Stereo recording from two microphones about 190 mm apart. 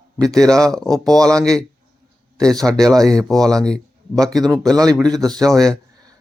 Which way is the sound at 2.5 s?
20° right (ahead or behind).